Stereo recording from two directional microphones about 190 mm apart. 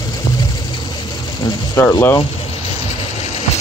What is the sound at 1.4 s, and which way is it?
Speech, 20° left (ahead or behind).